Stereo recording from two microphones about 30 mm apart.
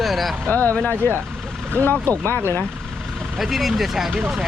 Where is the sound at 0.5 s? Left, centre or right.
Left.